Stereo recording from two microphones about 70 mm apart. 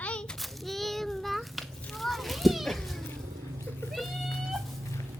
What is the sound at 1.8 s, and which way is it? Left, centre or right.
Children playing, centre.